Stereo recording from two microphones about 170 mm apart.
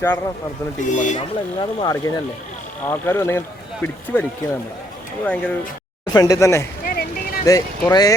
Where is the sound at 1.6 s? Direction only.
25° left (ahead or behind).